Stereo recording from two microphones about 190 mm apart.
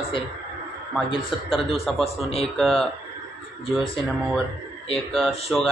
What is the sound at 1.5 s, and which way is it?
Speech, centre (ahead or behind).